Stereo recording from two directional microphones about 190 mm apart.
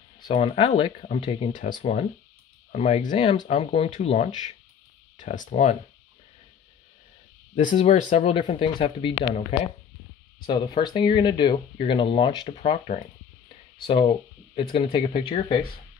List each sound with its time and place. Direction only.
0.2 s speech: 25° left (ahead or behind)
7.5 s speech: 35° left (ahead or behind)
8.4 s speech: 25° left (ahead or behind)
10.4 s speech: 25° left (ahead or behind)